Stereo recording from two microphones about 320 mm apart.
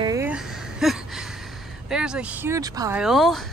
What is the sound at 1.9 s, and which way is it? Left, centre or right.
Speech, centre.